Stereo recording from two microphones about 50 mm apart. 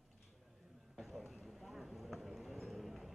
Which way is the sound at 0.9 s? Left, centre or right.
Centre.